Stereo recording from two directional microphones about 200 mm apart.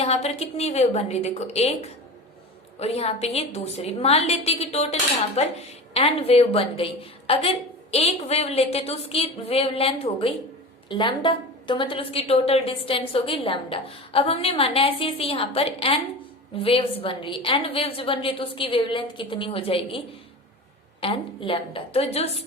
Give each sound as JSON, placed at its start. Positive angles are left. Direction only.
{"t": 0.0, "sound": "a woman's voice", "side_deg": 30}
{"t": 21.0, "sound": "a woman's voice", "side_deg": 25}